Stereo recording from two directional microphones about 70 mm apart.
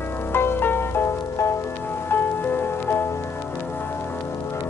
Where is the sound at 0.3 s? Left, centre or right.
Left.